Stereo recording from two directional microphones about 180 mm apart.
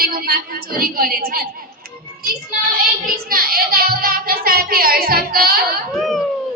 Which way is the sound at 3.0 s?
55° right (ahead or behind).